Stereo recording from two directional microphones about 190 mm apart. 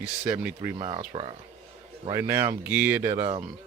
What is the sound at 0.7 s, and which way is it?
Speech, 25° right (ahead or behind).